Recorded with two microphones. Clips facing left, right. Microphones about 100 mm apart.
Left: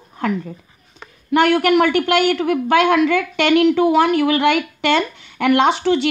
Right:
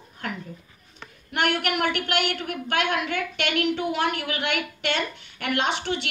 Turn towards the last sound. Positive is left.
turn(degrees=90)